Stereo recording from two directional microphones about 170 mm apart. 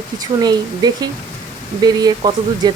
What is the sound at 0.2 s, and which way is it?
Speech, 25° right (ahead or behind).